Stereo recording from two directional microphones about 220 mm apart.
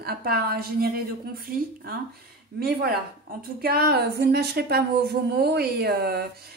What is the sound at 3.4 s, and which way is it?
A woman's voice, 45° right (ahead or behind).